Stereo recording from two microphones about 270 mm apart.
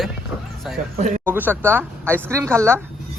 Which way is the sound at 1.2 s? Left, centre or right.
Centre.